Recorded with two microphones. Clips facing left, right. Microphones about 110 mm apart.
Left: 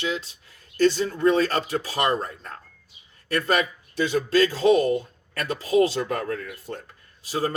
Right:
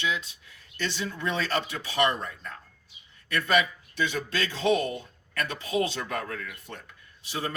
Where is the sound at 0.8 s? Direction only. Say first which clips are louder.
Left 12 dB; 40° left (ahead or behind).